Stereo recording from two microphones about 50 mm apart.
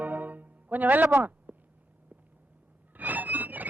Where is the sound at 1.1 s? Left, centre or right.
Right.